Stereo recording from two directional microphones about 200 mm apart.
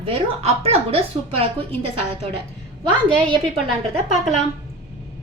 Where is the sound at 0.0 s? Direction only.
30° right (ahead or behind).